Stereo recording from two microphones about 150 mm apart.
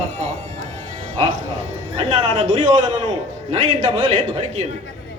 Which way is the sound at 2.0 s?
30° right (ahead or behind).